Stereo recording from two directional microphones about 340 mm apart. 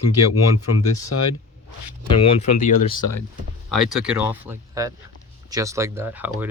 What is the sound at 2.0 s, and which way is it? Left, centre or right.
Speech, centre.